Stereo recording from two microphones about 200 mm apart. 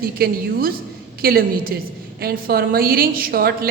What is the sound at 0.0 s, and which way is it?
A woman's voice, 50° right (ahead or behind).